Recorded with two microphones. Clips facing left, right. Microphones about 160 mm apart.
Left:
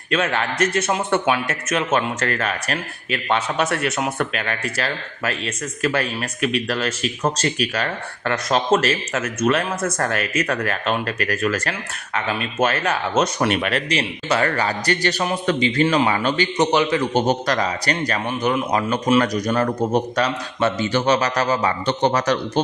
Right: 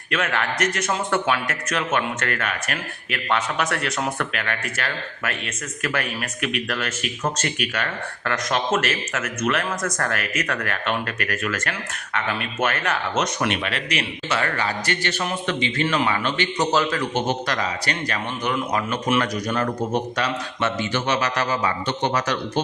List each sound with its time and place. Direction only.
0.1 s speech: 25° left (ahead or behind)
13.6 s speech: 45° left (ahead or behind)
16.6 s speech: 20° left (ahead or behind)
17.2 s speech: 40° left (ahead or behind)
18.3 s speech: 25° left (ahead or behind); by 22.6 s 45° left (ahead or behind)